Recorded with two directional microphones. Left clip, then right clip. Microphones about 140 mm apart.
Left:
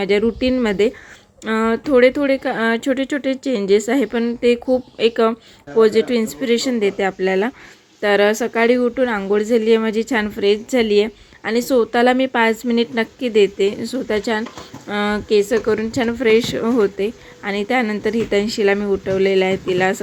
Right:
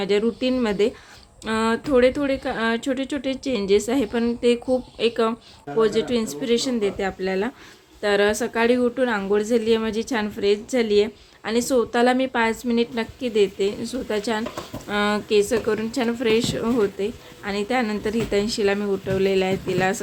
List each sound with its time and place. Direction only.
0.0 s speech: 25° left (ahead or behind)